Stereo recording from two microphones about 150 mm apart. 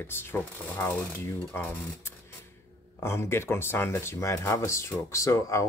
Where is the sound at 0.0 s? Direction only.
15° left (ahead or behind).